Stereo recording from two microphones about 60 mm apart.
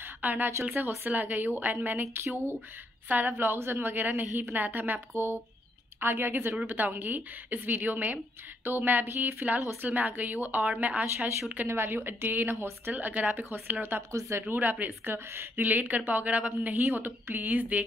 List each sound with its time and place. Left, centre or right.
0.2 s a woman's voice: right
2.2 s a woman's voice: right
5.1 s a woman's voice: right
11.5 s a woman's voice: right
12.9 s a woman's voice: right